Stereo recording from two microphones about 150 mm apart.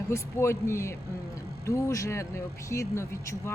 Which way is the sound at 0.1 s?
20° left (ahead or behind).